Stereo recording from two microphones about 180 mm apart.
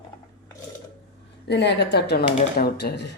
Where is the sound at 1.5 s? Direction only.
70° left (ahead or behind).